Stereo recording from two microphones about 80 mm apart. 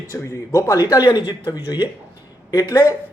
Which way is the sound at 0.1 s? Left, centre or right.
Left.